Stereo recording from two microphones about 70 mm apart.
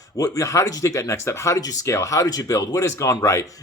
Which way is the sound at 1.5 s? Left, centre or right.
Left.